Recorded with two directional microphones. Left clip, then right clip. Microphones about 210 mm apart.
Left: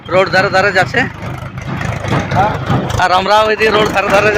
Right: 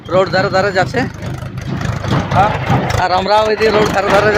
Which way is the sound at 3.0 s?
Centre (ahead or behind).